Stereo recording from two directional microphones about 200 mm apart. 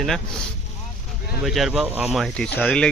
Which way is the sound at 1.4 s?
Centre (ahead or behind).